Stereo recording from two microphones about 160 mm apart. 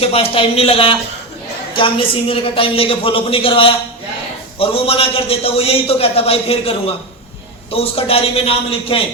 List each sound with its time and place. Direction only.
0.0 s a man's voice: 35° left (ahead or behind)